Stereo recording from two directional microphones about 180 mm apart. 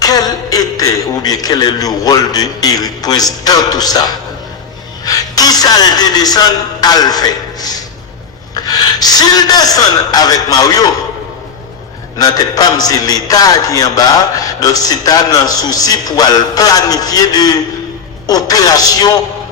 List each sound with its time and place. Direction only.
0.0 s a man's voice: 20° left (ahead or behind)
12.1 s a man's voice: 20° left (ahead or behind)